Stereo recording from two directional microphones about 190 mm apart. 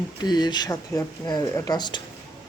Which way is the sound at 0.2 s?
20° left (ahead or behind).